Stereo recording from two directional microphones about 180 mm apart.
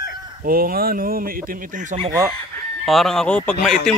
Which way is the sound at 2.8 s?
Centre (ahead or behind).